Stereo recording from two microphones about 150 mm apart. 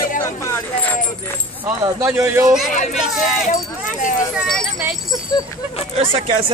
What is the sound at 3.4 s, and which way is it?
Speech, 60° left (ahead or behind).